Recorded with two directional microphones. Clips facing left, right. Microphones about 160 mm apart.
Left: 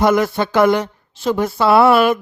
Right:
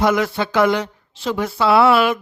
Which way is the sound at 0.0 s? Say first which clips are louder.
Left 3 dB; 45° left (ahead or behind).